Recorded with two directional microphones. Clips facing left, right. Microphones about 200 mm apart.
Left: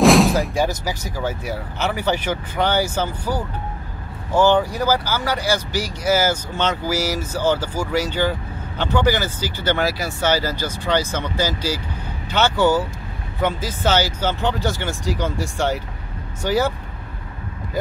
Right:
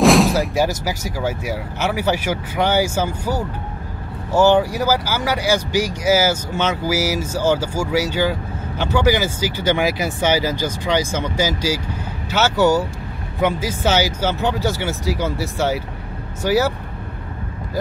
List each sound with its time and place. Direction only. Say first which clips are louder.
0.0 s speech: even; centre (ahead or behind)